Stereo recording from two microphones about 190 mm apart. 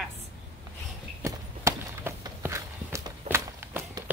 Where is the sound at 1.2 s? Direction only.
15° right (ahead or behind).